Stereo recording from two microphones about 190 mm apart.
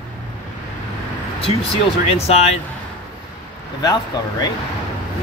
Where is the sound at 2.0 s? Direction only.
35° left (ahead or behind).